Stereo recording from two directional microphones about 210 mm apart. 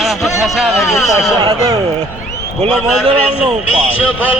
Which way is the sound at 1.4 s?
15° right (ahead or behind).